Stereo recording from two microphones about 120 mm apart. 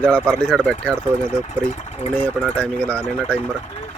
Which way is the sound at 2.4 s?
10° left (ahead or behind).